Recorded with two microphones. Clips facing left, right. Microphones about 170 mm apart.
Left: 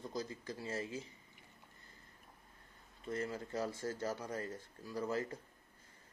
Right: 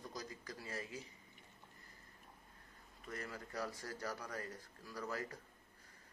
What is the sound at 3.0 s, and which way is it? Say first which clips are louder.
A man's voice: left 8 dB; 25° left (ahead or behind).